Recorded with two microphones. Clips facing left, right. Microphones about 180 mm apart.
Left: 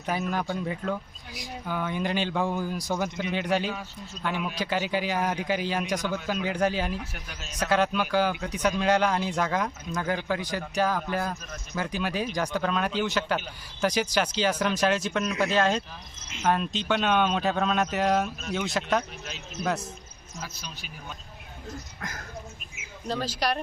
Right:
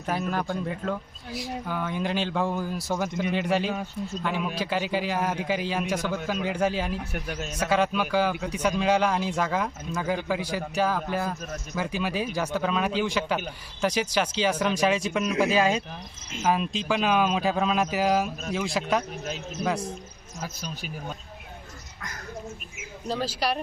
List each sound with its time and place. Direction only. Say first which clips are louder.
0.0 s a man's voice: right 1 dB; centre (ahead or behind)
7.1 s speech: right 9 dB; 50° right (ahead or behind)
7.6 s a man's voice: even; 5° right (ahead or behind)
14.8 s a man's voice: right 1 dB; centre (ahead or behind)
20.4 s speech: right 6 dB; 45° right (ahead or behind)
23.0 s a man's voice: right 1 dB; 5° right (ahead or behind)